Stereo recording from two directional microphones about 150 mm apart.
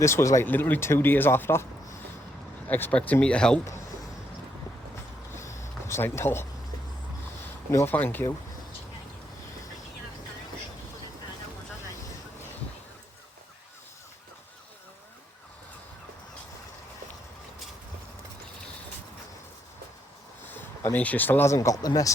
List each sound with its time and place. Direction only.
0.0 s speech: 20° left (ahead or behind)
5.3 s a sound: 20° left (ahead or behind)
7.7 s speech: 15° left (ahead or behind)
20.5 s speech: 10° left (ahead or behind)